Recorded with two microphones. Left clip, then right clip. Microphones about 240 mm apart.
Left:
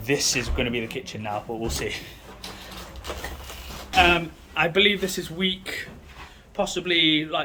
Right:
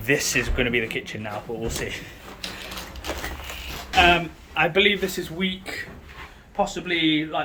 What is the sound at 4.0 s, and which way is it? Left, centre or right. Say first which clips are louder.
Speech: right 1 dB; centre.